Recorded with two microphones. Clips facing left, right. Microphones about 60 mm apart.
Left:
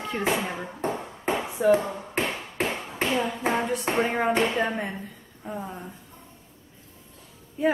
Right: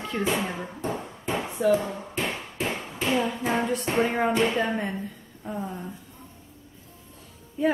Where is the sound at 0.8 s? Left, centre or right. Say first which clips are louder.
Left 2 dB; left.